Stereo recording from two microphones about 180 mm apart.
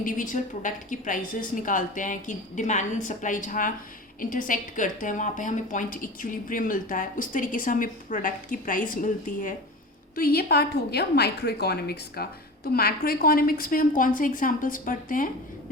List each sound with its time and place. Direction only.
0.0 s a woman's voice: 45° left (ahead or behind)
10.2 s a woman's voice: 60° left (ahead or behind)